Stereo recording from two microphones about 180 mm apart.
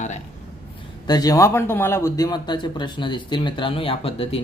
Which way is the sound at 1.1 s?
20° left (ahead or behind).